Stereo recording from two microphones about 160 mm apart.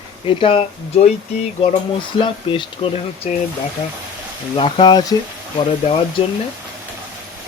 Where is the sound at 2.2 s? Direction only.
30° left (ahead or behind).